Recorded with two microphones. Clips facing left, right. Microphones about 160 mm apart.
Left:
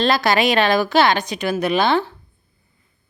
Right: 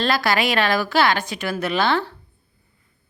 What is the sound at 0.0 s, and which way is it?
A woman's voice, 20° left (ahead or behind).